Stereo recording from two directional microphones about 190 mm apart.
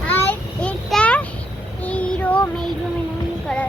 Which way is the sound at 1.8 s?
5° left (ahead or behind).